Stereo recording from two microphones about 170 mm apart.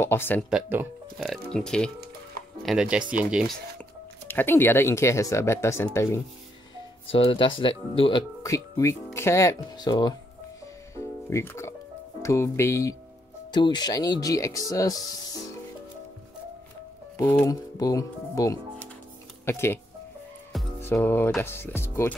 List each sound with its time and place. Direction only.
0.0 s speech: 15° left (ahead or behind)
0.5 s speech: 10° right (ahead or behind)
4.3 s speech: 10° left (ahead or behind)
7.1 s speech: 30° left (ahead or behind)
8.4 s speech: 20° left (ahead or behind)
13.5 s speech: 25° left (ahead or behind)
17.4 s speech: 20° left (ahead or behind)
20.8 s speech: 15° left (ahead or behind)